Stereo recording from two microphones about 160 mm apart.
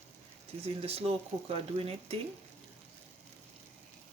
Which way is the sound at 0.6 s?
40° right (ahead or behind).